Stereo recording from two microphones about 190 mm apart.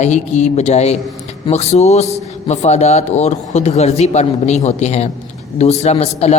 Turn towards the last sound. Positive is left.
turn(degrees=35)  # may be behind; listen again after turning